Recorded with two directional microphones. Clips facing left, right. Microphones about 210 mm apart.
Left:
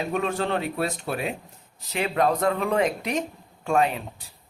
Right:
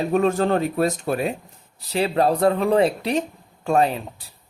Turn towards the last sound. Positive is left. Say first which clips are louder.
# right 3 dB
turn(degrees=-35)  # may be behind; listen again after turning